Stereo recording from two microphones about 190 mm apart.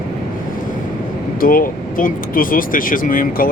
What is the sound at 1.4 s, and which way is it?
Speech, 50° left (ahead or behind).